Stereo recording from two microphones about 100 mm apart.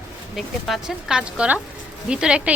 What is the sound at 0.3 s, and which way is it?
Speech, 5° right (ahead or behind).